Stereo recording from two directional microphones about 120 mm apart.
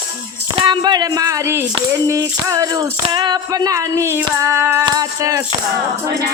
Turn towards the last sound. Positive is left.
turn(degrees=-30)  # may be behind; listen again after turning